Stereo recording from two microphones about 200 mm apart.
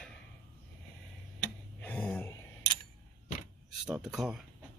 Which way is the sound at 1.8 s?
5° left (ahead or behind).